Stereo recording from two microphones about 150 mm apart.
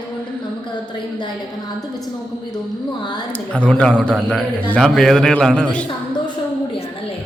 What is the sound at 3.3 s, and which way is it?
A man's voice, 5° left (ahead or behind).